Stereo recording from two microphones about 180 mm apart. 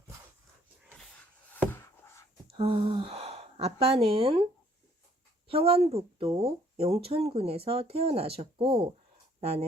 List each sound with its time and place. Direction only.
1.5 s a sound: 10° left (ahead or behind)
2.5 s speech: 30° right (ahead or behind)
5.5 s speech: 35° right (ahead or behind)